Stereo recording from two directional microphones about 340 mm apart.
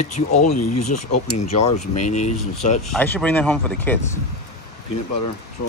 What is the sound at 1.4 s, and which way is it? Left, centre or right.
Speech, centre.